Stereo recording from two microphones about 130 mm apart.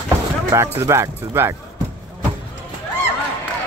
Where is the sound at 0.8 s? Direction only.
20° right (ahead or behind).